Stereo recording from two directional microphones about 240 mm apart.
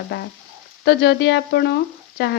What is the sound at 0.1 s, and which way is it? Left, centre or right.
Speech, left.